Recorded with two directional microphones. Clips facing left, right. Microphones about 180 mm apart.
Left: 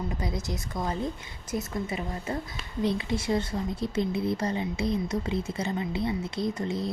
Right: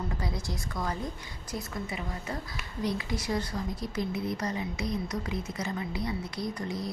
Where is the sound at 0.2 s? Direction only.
20° left (ahead or behind).